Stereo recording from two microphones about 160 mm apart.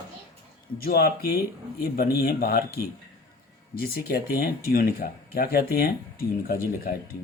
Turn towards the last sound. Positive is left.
turn(degrees=70)  # may be behind; listen again after turning